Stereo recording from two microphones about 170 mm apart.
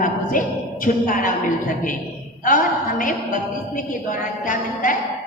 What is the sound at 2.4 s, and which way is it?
A woman's voice, 50° left (ahead or behind).